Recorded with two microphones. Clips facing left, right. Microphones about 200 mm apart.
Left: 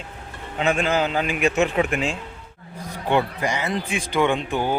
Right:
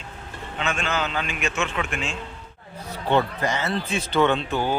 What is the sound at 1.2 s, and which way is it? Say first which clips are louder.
A man's voice: left 7 dB; 15° left (ahead or behind).